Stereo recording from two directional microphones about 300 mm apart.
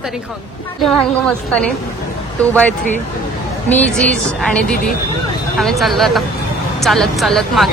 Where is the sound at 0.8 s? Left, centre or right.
Centre.